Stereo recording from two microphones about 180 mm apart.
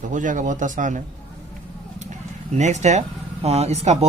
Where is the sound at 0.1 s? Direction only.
45° right (ahead or behind).